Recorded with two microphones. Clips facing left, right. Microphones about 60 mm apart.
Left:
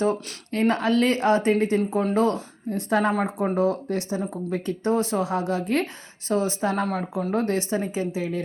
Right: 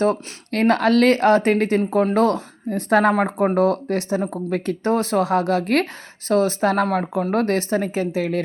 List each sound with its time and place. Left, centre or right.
0.0 s speech: right
1.8 s speech: right
2.1 s speech: right
3.2 s speech: right
4.2 s speech: right
4.5 s speech: right
5.8 s speech: right
6.8 s speech: right
7.7 s speech: right